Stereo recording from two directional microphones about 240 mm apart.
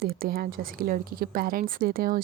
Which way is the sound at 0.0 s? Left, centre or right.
Right.